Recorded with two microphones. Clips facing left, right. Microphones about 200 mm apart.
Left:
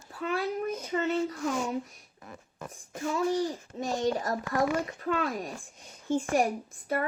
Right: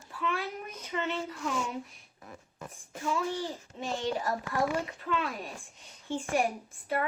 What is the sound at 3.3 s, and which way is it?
A child's voice, 40° left (ahead or behind).